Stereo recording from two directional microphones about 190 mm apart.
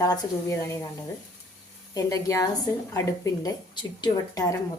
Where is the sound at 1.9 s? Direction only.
20° left (ahead or behind).